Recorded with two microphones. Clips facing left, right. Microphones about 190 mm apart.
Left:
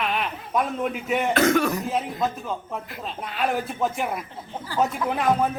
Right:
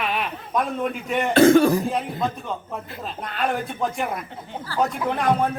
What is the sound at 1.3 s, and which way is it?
Speech, 30° right (ahead or behind).